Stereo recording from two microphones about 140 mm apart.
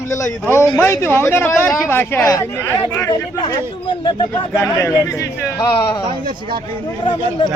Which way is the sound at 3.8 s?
35° left (ahead or behind).